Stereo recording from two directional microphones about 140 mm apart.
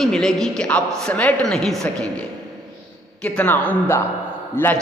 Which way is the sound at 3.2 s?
10° left (ahead or behind).